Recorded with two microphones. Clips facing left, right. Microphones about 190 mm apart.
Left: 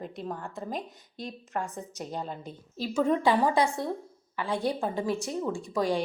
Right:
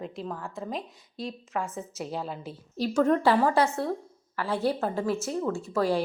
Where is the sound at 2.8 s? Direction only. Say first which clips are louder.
Right 2 dB; 10° left (ahead or behind).